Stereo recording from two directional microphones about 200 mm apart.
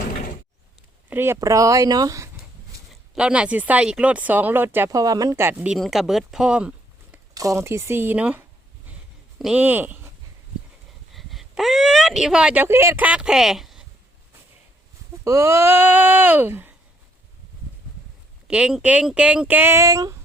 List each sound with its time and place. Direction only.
1.1 s speech: 10° right (ahead or behind)
2.9 s speech: 5° right (ahead or behind)
7.3 s speech: 15° right (ahead or behind)
11.1 s speech: centre (ahead or behind)
15.2 s speech: 15° right (ahead or behind)
18.4 s speech: 5° right (ahead or behind)